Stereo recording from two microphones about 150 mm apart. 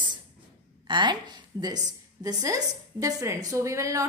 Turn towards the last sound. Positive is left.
turn(degrees=-20)  # may be behind; listen again after turning